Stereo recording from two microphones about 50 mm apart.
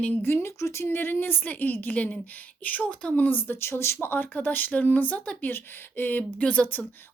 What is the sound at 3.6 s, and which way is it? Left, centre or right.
Speech, left.